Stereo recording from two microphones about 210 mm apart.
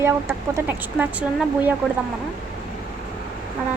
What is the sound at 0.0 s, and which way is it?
Speech, 10° right (ahead or behind).